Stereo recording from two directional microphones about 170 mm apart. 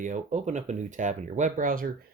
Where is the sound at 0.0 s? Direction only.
45° right (ahead or behind).